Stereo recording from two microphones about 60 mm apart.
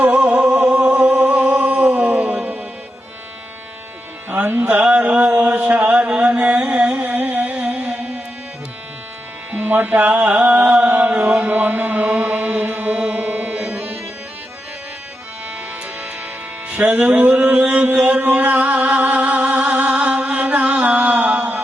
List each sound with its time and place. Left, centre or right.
0.0 s music: right
4.3 s music: right
4.9 s mantra: right
7.0 s a sound: right
9.5 s music: right
10.8 s mantra: right
11.1 s music: right
16.6 s mantra: right
18.3 s a sound: right
19.7 s mantra: right